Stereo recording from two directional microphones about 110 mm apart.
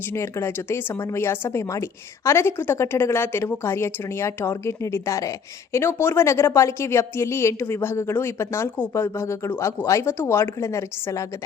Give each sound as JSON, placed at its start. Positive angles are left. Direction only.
{"t": 0.1, "sound": "a woman's voice", "side_deg": 25}